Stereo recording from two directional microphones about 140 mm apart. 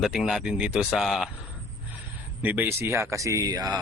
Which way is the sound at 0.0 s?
Centre (ahead or behind).